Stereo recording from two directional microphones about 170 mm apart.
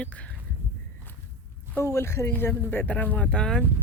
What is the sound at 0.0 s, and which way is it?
Speech, 10° left (ahead or behind).